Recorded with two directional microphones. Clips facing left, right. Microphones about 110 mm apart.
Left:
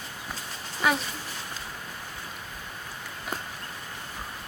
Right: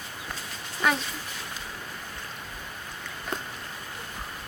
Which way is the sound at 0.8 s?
5° left (ahead or behind).